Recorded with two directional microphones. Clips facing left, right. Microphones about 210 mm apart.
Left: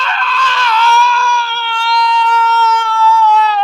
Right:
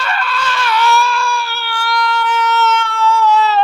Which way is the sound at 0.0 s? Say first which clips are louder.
Left 1 dB; 10° right (ahead or behind).